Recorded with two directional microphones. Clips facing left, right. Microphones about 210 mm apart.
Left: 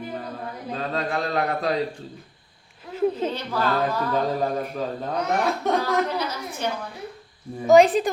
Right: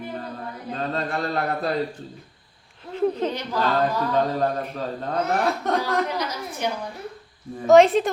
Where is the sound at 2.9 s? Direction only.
5° left (ahead or behind).